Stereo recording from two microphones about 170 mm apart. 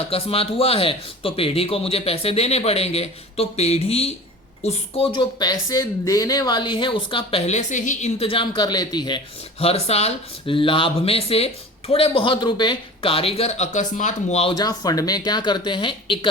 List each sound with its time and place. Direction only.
0.1 s speech: 35° left (ahead or behind)
14.6 s speech: 20° left (ahead or behind)